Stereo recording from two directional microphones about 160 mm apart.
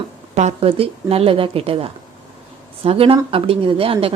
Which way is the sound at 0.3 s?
40° right (ahead or behind).